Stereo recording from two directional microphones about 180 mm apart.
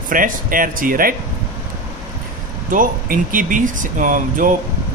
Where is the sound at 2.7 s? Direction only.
50° right (ahead or behind).